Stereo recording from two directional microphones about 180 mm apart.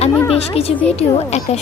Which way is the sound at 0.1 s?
10° left (ahead or behind).